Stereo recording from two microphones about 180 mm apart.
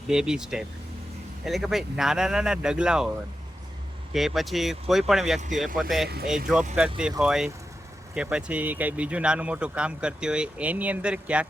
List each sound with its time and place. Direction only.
0.1 s speech: 5° right (ahead or behind)
4.1 s speech: centre (ahead or behind)